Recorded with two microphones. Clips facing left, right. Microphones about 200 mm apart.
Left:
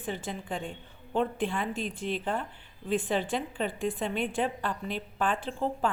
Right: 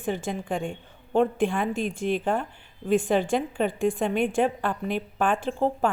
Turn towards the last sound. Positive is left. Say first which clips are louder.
# right 6 dB
turn(degrees=-50)  # may be behind; listen again after turning